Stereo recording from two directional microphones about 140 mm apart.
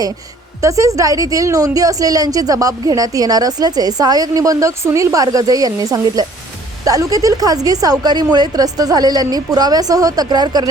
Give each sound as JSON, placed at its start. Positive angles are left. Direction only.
{"t": 0.6, "sound": "a woman's voice", "side_deg": -20}